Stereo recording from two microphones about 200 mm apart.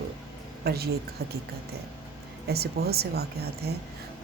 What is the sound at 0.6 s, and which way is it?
Speech, 50° right (ahead or behind).